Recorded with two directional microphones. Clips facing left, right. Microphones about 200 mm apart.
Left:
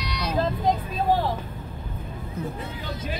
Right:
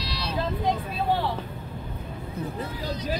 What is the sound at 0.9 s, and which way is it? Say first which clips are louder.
Speech: left 3 dB; 45° left (ahead or behind).